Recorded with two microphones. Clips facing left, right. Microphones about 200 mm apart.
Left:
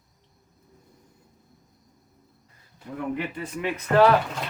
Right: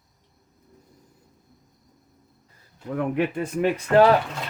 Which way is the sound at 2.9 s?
60° right (ahead or behind).